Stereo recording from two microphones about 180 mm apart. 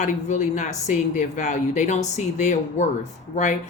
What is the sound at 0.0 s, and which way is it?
Speech, 40° left (ahead or behind).